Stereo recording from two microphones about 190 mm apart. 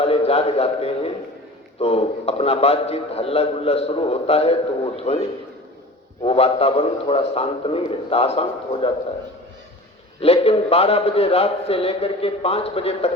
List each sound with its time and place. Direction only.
0.0 s a man's voice: 30° left (ahead or behind)
10.2 s a man's voice: 30° left (ahead or behind)